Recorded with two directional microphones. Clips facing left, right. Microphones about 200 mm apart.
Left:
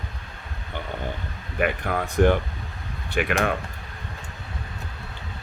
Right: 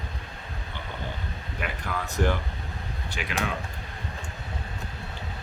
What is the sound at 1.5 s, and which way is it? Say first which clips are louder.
Speech: left 9 dB; 55° left (ahead or behind).